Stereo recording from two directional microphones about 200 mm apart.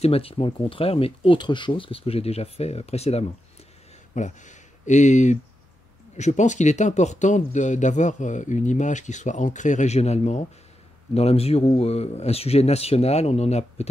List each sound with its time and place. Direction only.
0.0 s speech: 30° left (ahead or behind)